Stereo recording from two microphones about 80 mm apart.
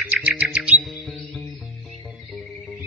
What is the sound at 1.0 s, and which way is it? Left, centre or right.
Music, centre.